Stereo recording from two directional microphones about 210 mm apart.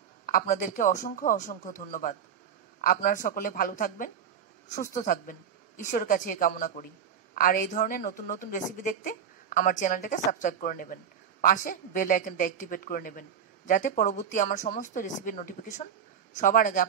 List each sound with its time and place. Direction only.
0.3 s a woman's voice: 40° left (ahead or behind)